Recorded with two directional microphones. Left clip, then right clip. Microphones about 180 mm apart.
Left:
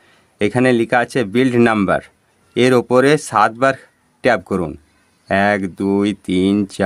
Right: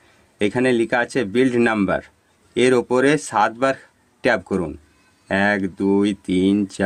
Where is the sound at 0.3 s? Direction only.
30° left (ahead or behind).